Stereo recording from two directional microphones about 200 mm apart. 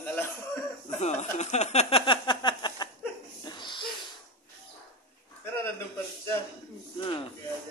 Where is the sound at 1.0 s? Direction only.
35° left (ahead or behind).